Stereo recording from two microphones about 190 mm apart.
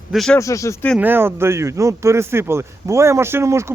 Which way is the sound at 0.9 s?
10° right (ahead or behind).